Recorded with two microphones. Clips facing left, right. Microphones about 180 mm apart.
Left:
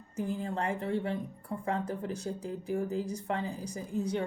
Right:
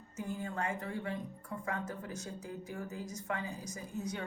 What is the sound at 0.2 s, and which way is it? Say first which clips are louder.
A woman's voice: left 5 dB; 30° left (ahead or behind).